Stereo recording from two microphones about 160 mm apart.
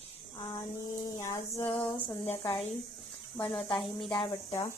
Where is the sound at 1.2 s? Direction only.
20° left (ahead or behind).